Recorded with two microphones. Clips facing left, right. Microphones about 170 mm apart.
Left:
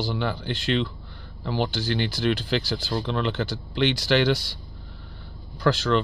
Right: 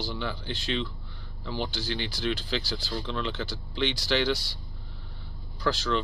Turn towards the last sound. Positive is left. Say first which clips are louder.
# left 6 dB
turn(degrees=60)  # may be behind; listen again after turning